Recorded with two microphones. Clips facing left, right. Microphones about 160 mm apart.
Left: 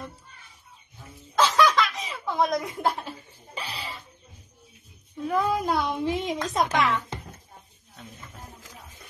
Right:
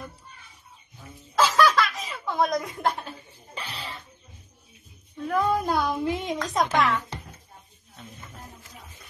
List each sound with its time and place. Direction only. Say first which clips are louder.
1.3 s baby laughter: even; centre (ahead or behind)
5.1 s a woman's voice: right 1 dB; centre (ahead or behind)